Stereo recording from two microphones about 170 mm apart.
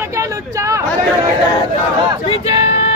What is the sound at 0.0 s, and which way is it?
Speech, 15° right (ahead or behind).